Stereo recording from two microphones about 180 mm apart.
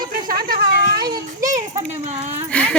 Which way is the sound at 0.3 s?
55° right (ahead or behind).